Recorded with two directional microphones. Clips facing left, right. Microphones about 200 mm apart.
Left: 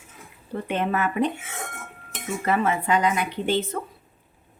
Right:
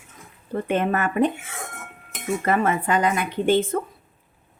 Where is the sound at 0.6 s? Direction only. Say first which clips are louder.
Right 2 dB; 50° right (ahead or behind).